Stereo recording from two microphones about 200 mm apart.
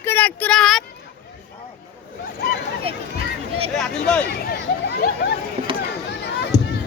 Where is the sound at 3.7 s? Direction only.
5° left (ahead or behind).